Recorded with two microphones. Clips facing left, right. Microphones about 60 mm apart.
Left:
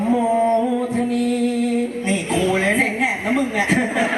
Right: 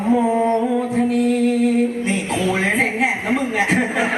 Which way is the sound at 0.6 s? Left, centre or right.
Centre.